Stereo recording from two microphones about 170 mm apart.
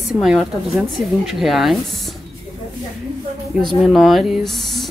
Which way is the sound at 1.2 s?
Centre (ahead or behind).